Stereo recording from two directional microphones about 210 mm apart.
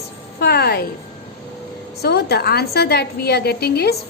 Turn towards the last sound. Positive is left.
turn(degrees=50)  # may be behind; listen again after turning